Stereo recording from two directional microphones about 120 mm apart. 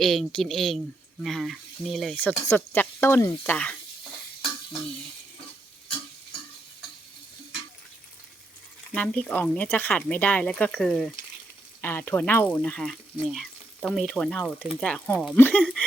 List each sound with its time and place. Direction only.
0.0 s speech: centre (ahead or behind)
2.1 s speech: 15° left (ahead or behind)
9.0 s speech: 10° left (ahead or behind)
11.8 s speech: 20° left (ahead or behind)
14.4 s speech: 15° right (ahead or behind)
14.8 s speech: 10° left (ahead or behind)